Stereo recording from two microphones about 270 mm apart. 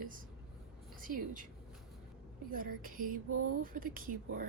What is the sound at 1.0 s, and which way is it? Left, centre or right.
Speech, right.